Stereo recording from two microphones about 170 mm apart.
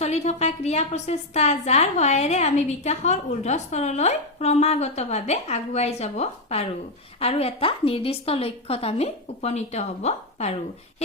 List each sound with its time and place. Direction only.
0.0 s a woman's voice: 40° left (ahead or behind)